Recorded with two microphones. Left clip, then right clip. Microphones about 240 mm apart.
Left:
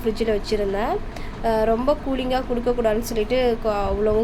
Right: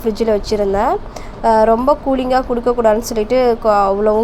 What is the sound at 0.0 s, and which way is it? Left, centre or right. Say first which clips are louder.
A woman's voice: right 7 dB; right.